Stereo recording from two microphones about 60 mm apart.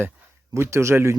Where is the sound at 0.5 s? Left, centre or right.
Right.